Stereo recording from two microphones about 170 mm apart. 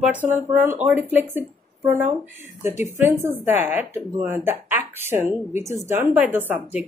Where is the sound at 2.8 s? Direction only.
15° right (ahead or behind).